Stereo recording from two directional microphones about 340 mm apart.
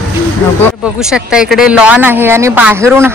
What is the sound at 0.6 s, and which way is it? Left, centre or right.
Speech, centre.